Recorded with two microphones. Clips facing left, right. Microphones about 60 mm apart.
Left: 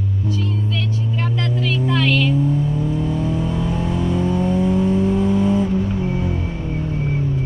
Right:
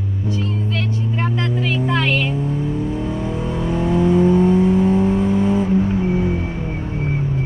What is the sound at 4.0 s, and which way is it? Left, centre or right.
Vehicle, right.